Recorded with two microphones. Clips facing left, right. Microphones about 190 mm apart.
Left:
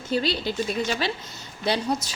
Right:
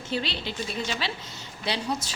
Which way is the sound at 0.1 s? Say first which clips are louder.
Left 6 dB; 40° left (ahead or behind).